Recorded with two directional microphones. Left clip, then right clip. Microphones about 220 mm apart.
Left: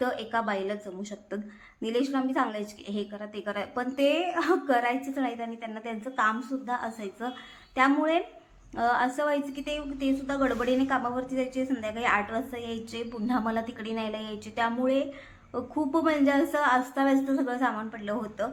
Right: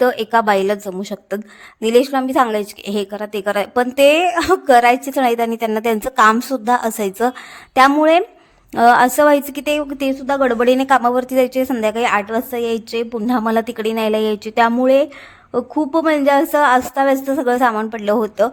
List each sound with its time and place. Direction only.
0.0 s a woman's voice: 50° right (ahead or behind)